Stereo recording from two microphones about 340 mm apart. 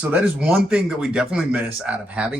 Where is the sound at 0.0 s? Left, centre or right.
Centre.